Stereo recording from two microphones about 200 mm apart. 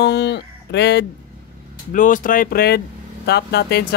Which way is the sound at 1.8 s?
40° left (ahead or behind).